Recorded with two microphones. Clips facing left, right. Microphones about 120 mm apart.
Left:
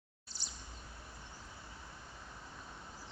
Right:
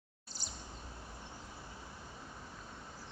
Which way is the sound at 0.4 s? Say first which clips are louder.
Right 3 dB; 45° right (ahead or behind).